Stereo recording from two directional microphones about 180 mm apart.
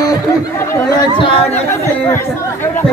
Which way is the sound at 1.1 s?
30° left (ahead or behind).